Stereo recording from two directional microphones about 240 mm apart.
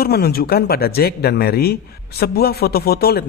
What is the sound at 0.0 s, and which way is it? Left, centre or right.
Speech, left.